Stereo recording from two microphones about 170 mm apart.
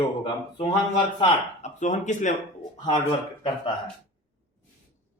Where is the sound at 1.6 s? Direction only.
45° left (ahead or behind).